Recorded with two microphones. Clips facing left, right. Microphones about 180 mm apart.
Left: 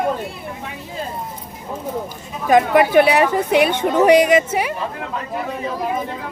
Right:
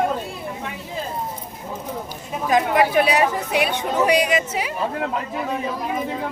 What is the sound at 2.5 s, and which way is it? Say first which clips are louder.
A woman's voice: left 5 dB; 60° left (ahead or behind).